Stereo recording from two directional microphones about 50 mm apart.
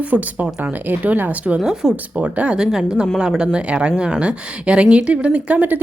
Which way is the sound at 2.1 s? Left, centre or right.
Right.